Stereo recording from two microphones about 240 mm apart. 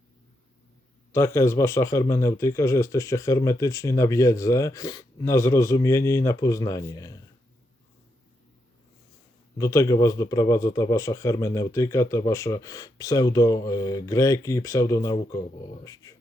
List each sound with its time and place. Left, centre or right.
1.1 s speech: centre
9.6 s speech: centre